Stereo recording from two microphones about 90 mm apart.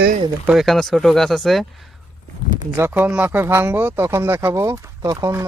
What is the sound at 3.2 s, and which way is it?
Speech, 25° right (ahead or behind).